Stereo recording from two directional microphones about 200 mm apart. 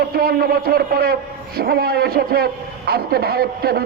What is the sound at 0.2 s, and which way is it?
A man's voice, 50° right (ahead or behind).